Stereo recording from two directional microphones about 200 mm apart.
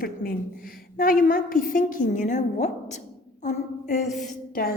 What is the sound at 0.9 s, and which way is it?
A woman's voice, 45° left (ahead or behind).